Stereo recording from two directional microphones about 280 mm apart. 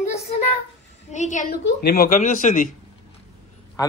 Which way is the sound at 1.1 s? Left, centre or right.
Left.